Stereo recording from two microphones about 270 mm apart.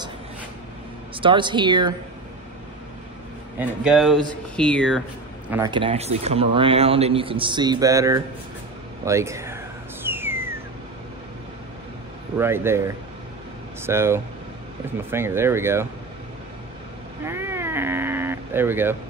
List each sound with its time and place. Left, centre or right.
1.1 s speech: centre
3.5 s speech: centre
5.5 s speech: centre
10.0 s a sound: centre
12.4 s speech: centre
17.2 s cat: centre